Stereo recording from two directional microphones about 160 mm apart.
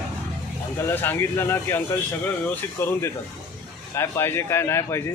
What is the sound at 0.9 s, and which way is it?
A man's voice, 15° left (ahead or behind).